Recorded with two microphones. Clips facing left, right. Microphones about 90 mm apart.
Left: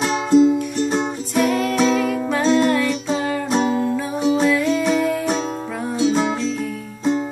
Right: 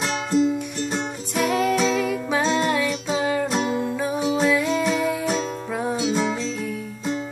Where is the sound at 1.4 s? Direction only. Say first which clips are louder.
Left 2 dB; 5° right (ahead or behind).